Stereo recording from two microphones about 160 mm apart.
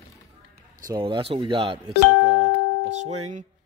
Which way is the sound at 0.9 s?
30° right (ahead or behind).